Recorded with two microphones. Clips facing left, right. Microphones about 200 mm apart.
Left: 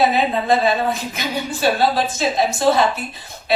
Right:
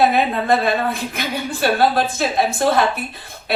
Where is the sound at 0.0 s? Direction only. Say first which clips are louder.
Right 1 dB; 55° right (ahead or behind).